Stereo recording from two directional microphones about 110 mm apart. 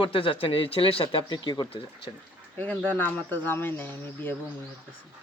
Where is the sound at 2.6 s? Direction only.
15° left (ahead or behind).